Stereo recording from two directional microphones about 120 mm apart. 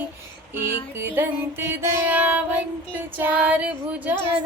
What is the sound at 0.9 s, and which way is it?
Music, 20° right (ahead or behind).